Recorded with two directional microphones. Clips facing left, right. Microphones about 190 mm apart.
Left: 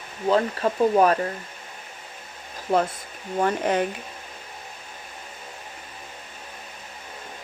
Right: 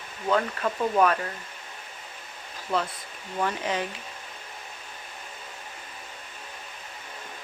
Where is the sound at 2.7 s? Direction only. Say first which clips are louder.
Left 6 dB; 45° left (ahead or behind).